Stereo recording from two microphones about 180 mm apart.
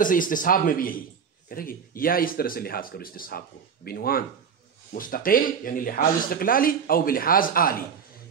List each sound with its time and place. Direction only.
0.0 s speech: 50° left (ahead or behind)